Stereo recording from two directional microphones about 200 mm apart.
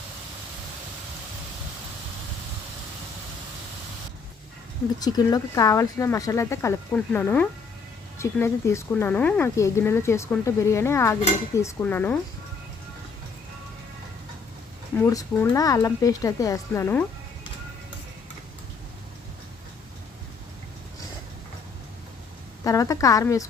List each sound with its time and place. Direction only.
5.0 s speech: 20° left (ahead or behind)
14.9 s speech: 15° left (ahead or behind)
22.6 s speech: 15° left (ahead or behind)